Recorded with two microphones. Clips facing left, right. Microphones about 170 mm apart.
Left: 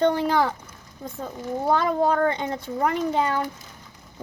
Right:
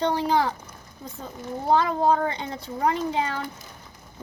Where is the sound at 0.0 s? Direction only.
55° left (ahead or behind).